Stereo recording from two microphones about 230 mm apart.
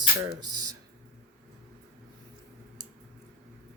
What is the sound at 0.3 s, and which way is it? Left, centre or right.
Speech, centre.